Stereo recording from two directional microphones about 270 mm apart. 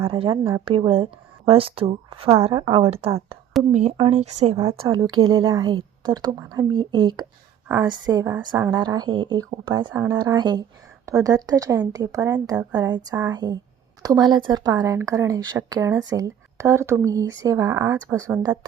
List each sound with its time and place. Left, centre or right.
0.0 s a woman's voice: centre